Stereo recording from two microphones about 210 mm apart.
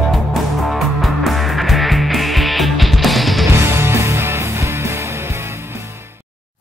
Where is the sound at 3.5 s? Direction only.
10° right (ahead or behind).